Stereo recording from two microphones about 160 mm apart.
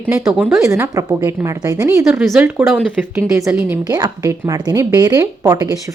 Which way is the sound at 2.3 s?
10° right (ahead or behind).